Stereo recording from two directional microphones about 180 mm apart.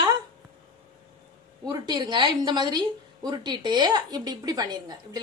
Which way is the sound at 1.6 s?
20° right (ahead or behind).